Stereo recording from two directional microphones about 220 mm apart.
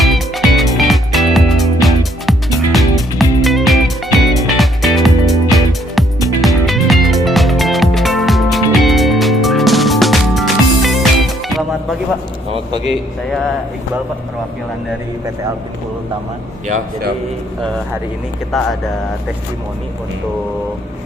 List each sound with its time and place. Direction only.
0.0 s music: centre (ahead or behind)
16.6 s speech: 40° right (ahead or behind)
18.5 s speech: centre (ahead or behind)